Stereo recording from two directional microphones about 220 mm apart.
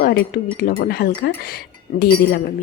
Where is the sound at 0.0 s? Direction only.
45° left (ahead or behind).